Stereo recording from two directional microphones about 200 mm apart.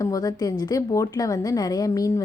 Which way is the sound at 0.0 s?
20° left (ahead or behind).